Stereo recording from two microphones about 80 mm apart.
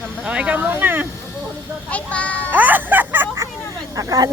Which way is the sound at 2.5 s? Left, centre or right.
Right.